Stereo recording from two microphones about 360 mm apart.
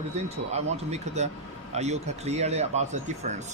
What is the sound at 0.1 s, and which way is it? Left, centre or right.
Speech, centre.